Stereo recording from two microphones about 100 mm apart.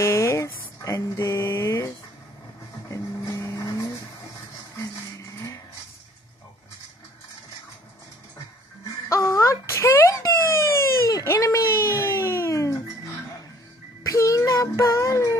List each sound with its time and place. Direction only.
0.0 s mantra: 30° left (ahead or behind)
2.9 s vehicle: 35° left (ahead or behind)
9.1 s a sound: 30° left (ahead or behind)
14.0 s child singing: 30° left (ahead or behind)